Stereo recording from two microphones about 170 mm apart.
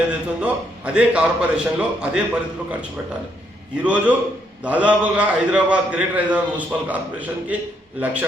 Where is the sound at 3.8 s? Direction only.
10° right (ahead or behind).